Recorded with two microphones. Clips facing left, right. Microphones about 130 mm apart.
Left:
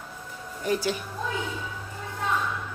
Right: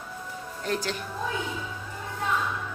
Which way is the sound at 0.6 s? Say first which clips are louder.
Left 4 dB; 10° left (ahead or behind).